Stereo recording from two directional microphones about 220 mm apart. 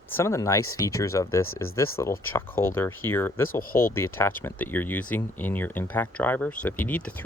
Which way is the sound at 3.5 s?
40° left (ahead or behind).